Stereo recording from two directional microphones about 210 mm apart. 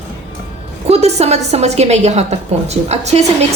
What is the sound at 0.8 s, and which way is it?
A woman's voice, 30° right (ahead or behind).